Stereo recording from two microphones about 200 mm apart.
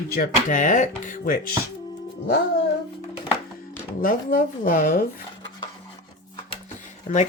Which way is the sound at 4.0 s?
45° left (ahead or behind).